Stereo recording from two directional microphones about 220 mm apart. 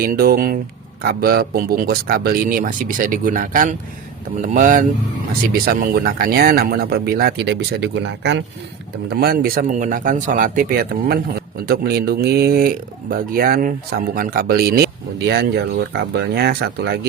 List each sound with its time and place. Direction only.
0.0 s speech: 40° right (ahead or behind)
9.2 s speech: 40° right (ahead or behind)